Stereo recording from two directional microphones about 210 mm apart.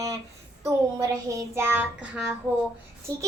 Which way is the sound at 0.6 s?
15° right (ahead or behind).